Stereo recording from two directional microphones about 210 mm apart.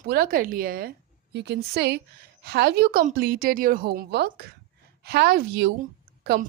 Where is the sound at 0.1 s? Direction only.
45° right (ahead or behind).